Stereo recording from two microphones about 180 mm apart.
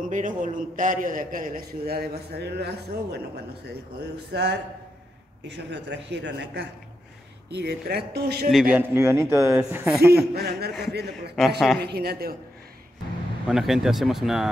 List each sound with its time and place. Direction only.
0.1 s a man's voice: 45° right (ahead or behind)
8.5 s speech: 5° right (ahead or behind)
10.3 s speech: 60° right (ahead or behind)
11.3 s speech: centre (ahead or behind)
11.8 s speech: 60° right (ahead or behind)
13.5 s speech: centre (ahead or behind)